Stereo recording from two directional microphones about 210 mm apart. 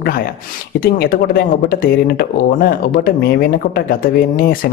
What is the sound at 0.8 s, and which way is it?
Speech, 45° left (ahead or behind).